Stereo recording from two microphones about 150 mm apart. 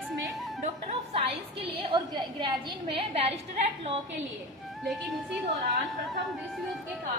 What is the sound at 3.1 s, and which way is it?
Speech, 45° right (ahead or behind).